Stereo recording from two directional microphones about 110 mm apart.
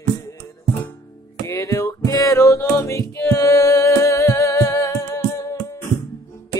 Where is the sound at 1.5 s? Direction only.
30° left (ahead or behind).